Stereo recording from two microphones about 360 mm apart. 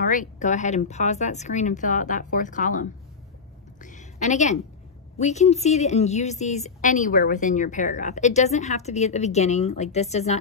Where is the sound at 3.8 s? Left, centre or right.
Left.